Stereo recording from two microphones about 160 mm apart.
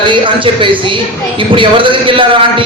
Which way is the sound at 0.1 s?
30° right (ahead or behind).